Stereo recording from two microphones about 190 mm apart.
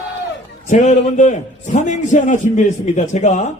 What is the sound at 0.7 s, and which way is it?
A man's voice, 40° left (ahead or behind).